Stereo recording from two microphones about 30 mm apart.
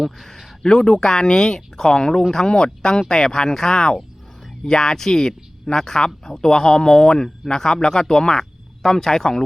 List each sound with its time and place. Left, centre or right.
0.6 s a man's voice: left